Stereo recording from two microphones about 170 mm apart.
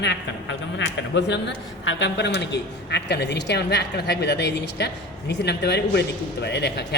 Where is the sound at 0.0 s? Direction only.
90° left.